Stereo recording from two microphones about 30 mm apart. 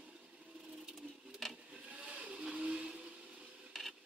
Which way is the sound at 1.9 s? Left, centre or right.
Right.